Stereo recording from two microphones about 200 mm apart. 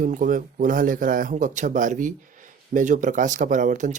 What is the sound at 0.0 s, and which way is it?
Speech, 40° right (ahead or behind).